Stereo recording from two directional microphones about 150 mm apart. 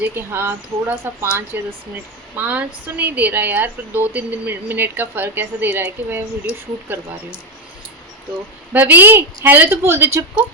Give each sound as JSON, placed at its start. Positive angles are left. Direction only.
{"t": 0.0, "sound": "a woman's voice", "side_deg": -15}
{"t": 8.7, "sound": "a woman's voice", "side_deg": -10}